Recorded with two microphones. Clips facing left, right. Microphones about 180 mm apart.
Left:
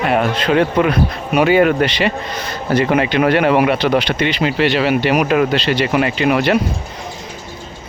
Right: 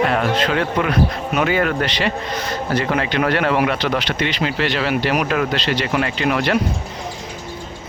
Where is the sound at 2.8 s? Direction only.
15° left (ahead or behind).